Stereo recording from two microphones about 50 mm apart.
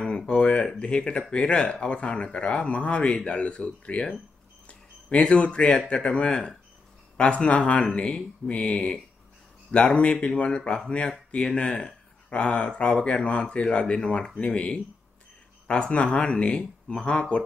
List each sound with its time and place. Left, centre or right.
0.3 s a sound: centre
0.7 s speech: left
4.6 s a sound: left
5.9 s speech: centre
11.4 s speech: centre
12.3 s speech: left
16.2 s speech: left